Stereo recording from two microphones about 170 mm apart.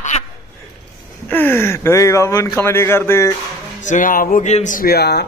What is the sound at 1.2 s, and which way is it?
Speech, 10° left (ahead or behind).